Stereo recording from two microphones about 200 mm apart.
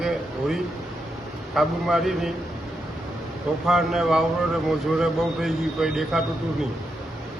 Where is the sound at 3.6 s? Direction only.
Centre (ahead or behind).